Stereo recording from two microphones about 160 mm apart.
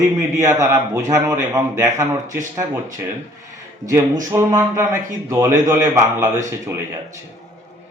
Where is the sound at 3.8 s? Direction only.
20° right (ahead or behind).